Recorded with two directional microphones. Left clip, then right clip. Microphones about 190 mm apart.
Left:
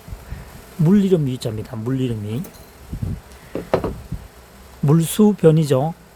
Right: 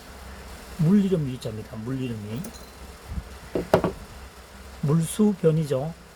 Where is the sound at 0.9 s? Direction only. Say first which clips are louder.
Left 7 dB; 65° left (ahead or behind).